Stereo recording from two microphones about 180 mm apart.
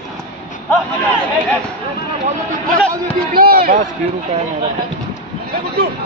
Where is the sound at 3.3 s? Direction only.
55° right (ahead or behind).